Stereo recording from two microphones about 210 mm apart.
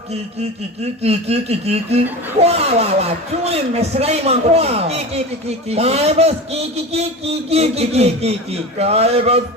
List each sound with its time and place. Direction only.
1.0 s a man's voice: 30° right (ahead or behind)